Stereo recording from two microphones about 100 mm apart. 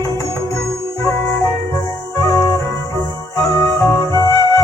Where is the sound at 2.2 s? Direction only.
30° left (ahead or behind).